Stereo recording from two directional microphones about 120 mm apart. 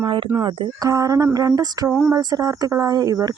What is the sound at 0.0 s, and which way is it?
Speech, 45° right (ahead or behind).